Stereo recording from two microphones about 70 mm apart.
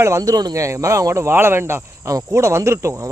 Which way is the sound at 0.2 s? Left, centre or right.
Right.